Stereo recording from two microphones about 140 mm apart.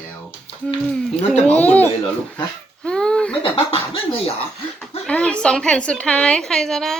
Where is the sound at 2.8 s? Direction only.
5° left (ahead or behind).